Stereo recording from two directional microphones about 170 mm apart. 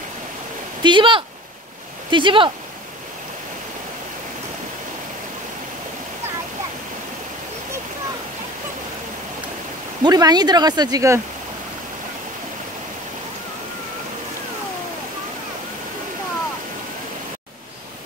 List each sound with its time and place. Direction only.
0.8 s speech: 30° right (ahead or behind)
10.0 s speech: 25° right (ahead or behind)